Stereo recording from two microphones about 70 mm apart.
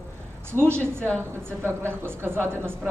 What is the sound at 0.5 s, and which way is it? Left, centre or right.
A woman's voice, right.